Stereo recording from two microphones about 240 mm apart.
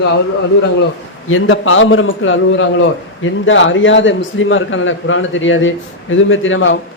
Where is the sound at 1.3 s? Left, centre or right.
Left.